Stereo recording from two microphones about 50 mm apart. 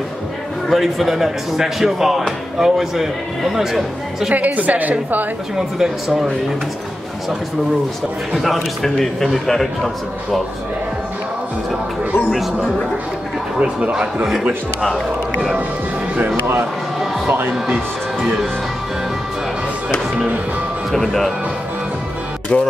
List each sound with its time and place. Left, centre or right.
0.7 s speech: centre
4.3 s a woman's voice: right
5.8 s speech: centre
8.3 s a man's voice: centre
13.6 s a man's voice: right
20.9 s speech: centre
22.5 s speech: left